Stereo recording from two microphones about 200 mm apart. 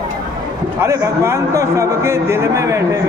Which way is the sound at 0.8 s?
15° right (ahead or behind).